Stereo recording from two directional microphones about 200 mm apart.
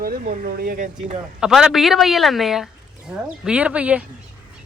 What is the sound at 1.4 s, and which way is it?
A man's voice, 5° right (ahead or behind).